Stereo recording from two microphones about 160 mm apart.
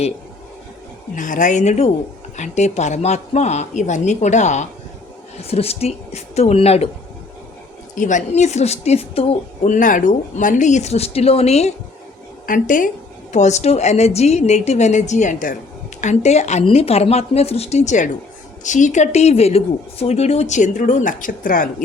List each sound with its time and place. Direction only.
1.1 s a woman's voice: 55° left (ahead or behind)
7.9 s a woman's voice: 50° left (ahead or behind)
12.5 s a woman's voice: 55° left (ahead or behind)